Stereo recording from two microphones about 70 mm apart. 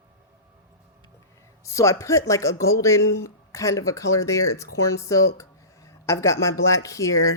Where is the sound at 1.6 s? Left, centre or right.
Left.